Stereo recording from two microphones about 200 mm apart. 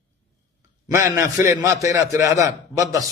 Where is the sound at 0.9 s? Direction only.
15° right (ahead or behind).